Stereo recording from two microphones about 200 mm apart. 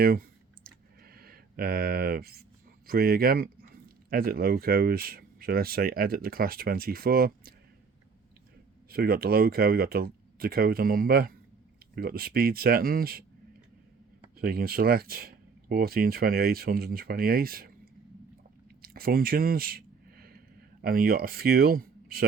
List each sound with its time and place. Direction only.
0.0 s clicking: 50° right (ahead or behind)
2.8 s speech: 50° right (ahead or behind)
8.9 s speech: 50° right (ahead or behind)
14.3 s speech: 45° right (ahead or behind)
18.8 s a sound: 50° right (ahead or behind)
20.8 s speech: 45° right (ahead or behind)